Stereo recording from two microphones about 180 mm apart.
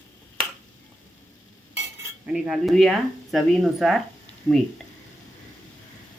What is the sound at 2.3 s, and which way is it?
Speech, centre (ahead or behind).